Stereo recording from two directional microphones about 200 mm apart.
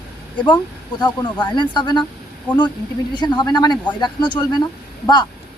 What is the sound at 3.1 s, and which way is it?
Speech, 20° left (ahead or behind).